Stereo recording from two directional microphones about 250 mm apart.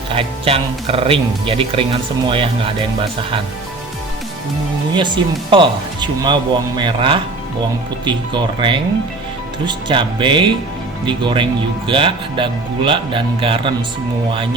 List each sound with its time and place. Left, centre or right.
0.1 s speech: right
4.9 s speech: centre